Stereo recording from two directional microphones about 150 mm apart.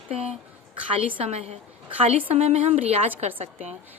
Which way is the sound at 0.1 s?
45° right (ahead or behind).